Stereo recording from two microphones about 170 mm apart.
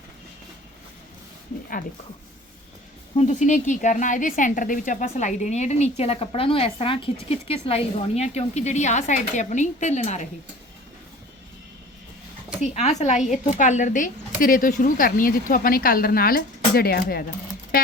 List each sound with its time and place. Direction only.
3.2 s a woman's voice: 45° left (ahead or behind)
12.6 s a woman's voice: 45° left (ahead or behind); by 17.2 s 60° left (ahead or behind)